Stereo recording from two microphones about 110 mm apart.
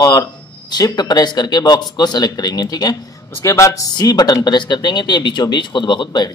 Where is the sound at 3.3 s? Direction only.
25° left (ahead or behind).